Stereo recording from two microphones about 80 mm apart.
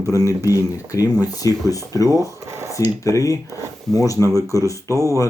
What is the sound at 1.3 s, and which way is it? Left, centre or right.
Speech, left.